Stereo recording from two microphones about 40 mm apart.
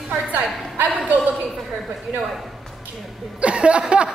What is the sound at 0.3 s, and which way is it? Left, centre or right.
Speech, right.